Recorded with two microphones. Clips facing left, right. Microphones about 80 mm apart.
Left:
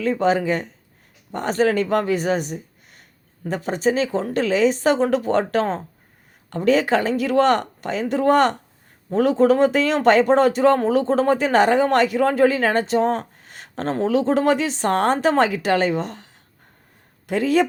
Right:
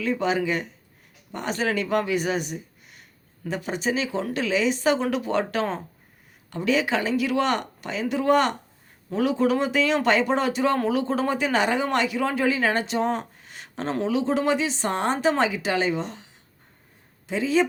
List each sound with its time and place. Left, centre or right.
0.0 s speech: left